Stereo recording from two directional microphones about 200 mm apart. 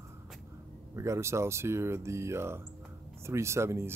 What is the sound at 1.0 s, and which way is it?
Speech, 15° right (ahead or behind).